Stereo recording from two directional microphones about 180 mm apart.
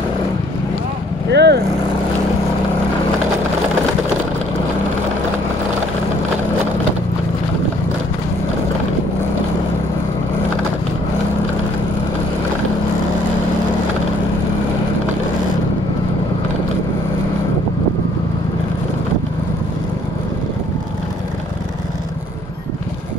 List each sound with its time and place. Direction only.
1.3 s vehicle: 70° right (ahead or behind)